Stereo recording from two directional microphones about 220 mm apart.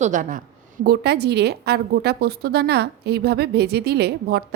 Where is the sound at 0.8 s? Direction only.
45° right (ahead or behind).